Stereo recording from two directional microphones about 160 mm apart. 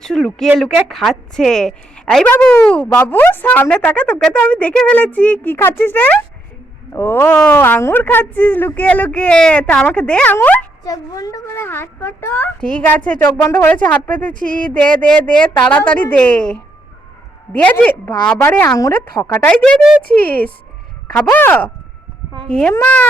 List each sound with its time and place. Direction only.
0.0 s a woman's voice: 5° left (ahead or behind)
10.8 s a woman's voice: 20° left (ahead or behind)
14.3 s a sound: 60° right (ahead or behind)
14.7 s a woman's voice: 5° left (ahead or behind)